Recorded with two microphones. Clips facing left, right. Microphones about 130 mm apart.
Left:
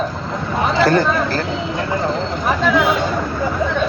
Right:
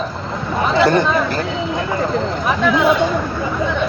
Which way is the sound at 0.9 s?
20° right (ahead or behind).